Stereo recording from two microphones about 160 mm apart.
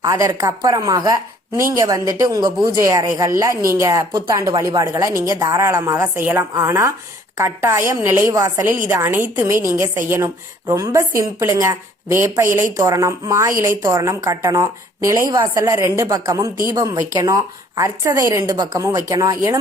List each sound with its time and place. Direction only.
0.1 s a woman's voice: 20° right (ahead or behind)